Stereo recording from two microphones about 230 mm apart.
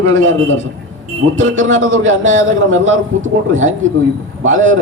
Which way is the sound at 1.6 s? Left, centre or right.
Right.